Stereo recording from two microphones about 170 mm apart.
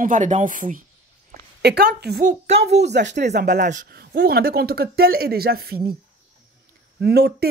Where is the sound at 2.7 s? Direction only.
85° right.